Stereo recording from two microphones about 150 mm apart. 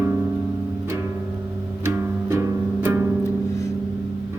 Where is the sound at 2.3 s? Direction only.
15° right (ahead or behind).